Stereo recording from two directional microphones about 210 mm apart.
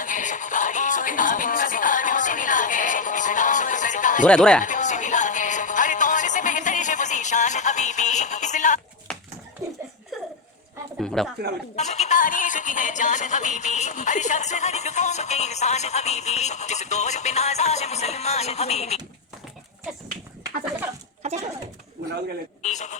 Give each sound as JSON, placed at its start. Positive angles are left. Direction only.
{"t": 0.0, "sound": "music", "side_deg": 40}
{"t": 4.3, "sound": "speech", "side_deg": 5}
{"t": 4.6, "sound": "music", "side_deg": 35}
{"t": 9.6, "sound": "laughter", "side_deg": -15}
{"t": 11.0, "sound": "a sound", "side_deg": 0}
{"t": 11.8, "sound": "music", "side_deg": 35}
{"t": 21.2, "sound": "a sound", "side_deg": -30}
{"t": 22.0, "sound": "bird", "side_deg": -50}
{"t": 22.6, "sound": "a sound", "side_deg": 35}